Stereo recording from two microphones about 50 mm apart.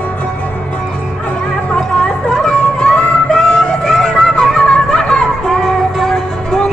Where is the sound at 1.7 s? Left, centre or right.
Centre.